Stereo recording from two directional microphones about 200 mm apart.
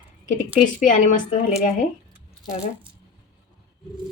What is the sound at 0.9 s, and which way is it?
Speech, 40° left (ahead or behind).